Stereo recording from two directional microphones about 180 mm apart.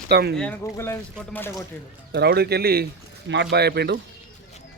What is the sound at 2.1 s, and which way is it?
Speech, 65° right (ahead or behind).